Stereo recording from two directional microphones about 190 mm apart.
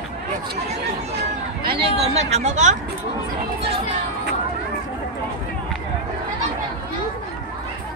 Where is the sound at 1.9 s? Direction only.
35° right (ahead or behind).